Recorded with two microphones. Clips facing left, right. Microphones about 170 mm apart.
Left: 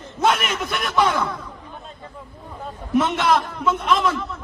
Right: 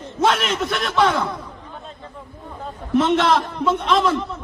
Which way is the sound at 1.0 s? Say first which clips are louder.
Right 3 dB; 25° right (ahead or behind).